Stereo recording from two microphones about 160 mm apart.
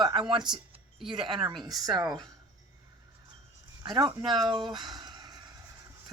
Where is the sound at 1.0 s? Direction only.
30° right (ahead or behind).